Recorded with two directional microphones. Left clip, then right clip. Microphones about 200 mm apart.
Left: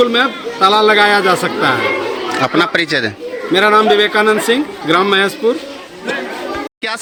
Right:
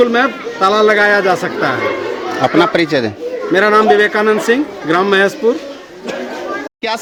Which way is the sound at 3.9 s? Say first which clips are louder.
Right 1 dB; 25° right (ahead or behind).